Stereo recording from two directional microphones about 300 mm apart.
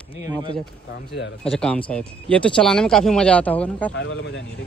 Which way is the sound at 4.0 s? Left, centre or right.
Left.